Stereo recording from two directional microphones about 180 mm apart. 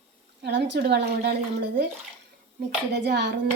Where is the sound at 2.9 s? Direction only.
70° right (ahead or behind).